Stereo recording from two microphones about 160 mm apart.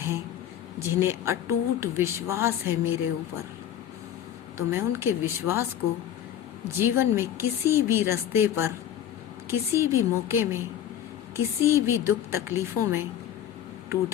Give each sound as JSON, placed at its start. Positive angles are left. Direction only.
{"t": 0.8, "sound": "a woman's voice", "side_deg": -15}
{"t": 4.5, "sound": "a woman's voice", "side_deg": -15}
{"t": 6.7, "sound": "a woman's voice", "side_deg": -15}